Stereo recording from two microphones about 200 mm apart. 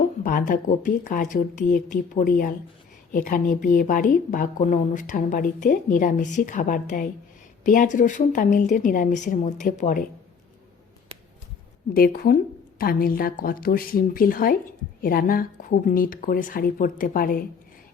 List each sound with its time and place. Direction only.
0.2 s a woman's voice: 40° left (ahead or behind)
11.9 s speech: 50° left (ahead or behind)